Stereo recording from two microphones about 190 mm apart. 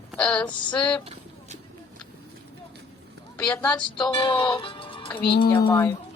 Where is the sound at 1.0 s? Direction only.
30° right (ahead or behind).